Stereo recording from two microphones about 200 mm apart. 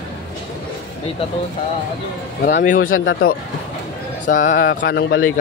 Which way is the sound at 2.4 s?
45° left (ahead or behind).